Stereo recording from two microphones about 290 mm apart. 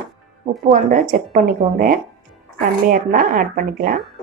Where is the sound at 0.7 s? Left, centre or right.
Right.